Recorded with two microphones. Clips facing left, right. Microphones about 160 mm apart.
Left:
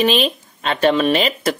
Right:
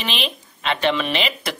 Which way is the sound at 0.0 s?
45° left (ahead or behind).